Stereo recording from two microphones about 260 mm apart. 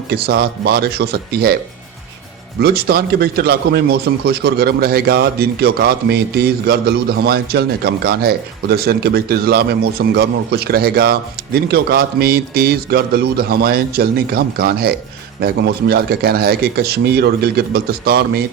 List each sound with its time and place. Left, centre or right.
0.1 s a man's voice: right
2.6 s a man's voice: right